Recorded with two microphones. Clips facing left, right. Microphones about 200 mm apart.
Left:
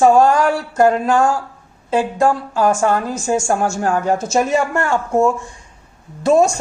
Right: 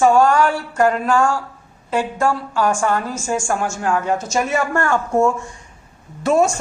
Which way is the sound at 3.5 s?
40° left (ahead or behind).